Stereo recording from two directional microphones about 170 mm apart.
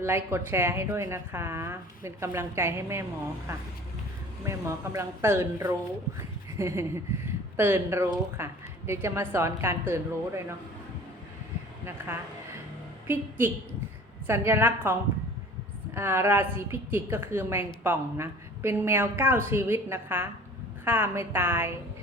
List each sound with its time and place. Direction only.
0.0 s a woman's voice: 15° right (ahead or behind)
4.4 s a woman's voice: 15° right (ahead or behind)
11.9 s a woman's voice: 15° right (ahead or behind)
16.0 s a woman's voice: 15° right (ahead or behind)